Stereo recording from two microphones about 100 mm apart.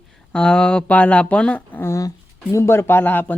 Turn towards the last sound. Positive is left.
turn(degrees=20)  # may be behind; listen again after turning